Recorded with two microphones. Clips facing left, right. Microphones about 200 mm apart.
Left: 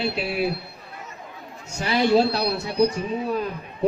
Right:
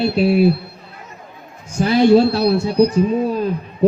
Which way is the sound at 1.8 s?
50° right (ahead or behind).